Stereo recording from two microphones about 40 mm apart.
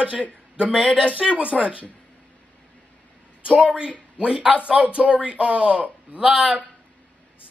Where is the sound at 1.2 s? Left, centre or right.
Right.